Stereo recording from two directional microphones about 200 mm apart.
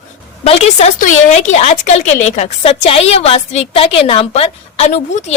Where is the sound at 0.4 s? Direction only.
30° left (ahead or behind).